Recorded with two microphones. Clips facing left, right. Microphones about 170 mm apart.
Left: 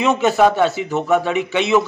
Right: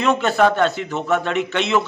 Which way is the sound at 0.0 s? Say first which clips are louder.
Left 2 dB; 10° left (ahead or behind).